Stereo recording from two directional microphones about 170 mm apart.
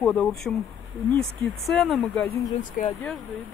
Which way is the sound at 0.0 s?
5° left (ahead or behind).